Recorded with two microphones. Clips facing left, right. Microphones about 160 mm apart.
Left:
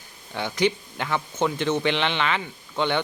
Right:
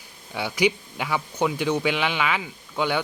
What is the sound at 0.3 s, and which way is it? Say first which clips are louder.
Speech: even; 10° right (ahead or behind).